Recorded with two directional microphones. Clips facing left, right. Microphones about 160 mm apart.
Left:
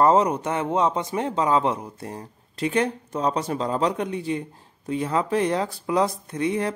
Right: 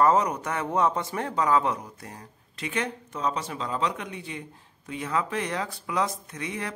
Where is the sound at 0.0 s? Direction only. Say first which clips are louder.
Left 4 dB; 30° left (ahead or behind).